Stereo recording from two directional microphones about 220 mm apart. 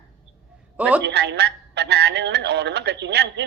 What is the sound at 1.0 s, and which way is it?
Speech, 50° right (ahead or behind).